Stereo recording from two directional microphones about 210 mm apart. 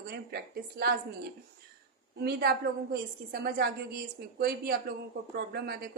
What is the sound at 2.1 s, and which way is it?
A woman's voice, 50° right (ahead or behind).